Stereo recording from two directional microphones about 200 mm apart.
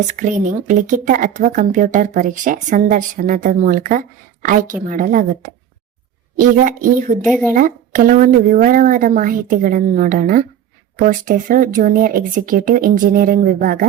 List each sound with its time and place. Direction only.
0.2 s speech: 40° right (ahead or behind)
6.4 s speech: 40° right (ahead or behind)